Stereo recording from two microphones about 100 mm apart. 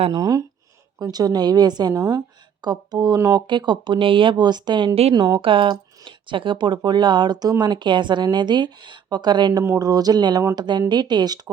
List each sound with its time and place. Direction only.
0.1 s speech: 40° right (ahead or behind)
3.4 s speech: 50° right (ahead or behind)
9.6 s speech: 35° right (ahead or behind)